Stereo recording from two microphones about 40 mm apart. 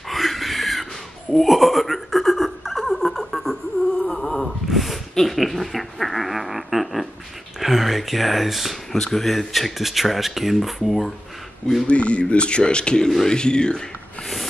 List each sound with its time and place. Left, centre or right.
0.1 s a sound: centre
7.6 s speech: centre
8.9 s speech: centre
11.9 s speech: left